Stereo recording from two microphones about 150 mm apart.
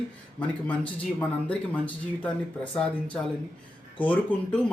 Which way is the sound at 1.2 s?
10° left (ahead or behind).